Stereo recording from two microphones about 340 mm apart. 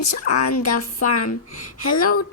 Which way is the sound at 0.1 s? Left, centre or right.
Left.